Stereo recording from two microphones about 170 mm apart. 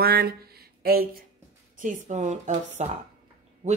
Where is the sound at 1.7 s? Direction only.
50° right (ahead or behind).